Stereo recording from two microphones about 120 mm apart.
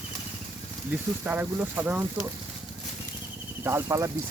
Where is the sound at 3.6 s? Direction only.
20° right (ahead or behind).